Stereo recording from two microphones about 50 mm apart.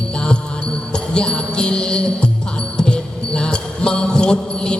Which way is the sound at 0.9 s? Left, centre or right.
Centre.